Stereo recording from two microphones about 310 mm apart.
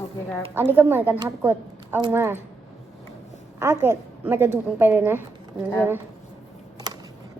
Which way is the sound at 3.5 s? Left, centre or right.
Centre.